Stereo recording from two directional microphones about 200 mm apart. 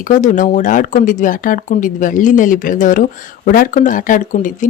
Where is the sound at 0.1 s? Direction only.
40° left (ahead or behind).